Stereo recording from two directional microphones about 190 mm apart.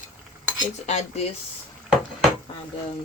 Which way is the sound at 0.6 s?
40° left (ahead or behind).